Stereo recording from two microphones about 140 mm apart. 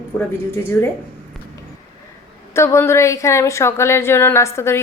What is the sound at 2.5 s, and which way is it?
A woman's voice, 20° left (ahead or behind).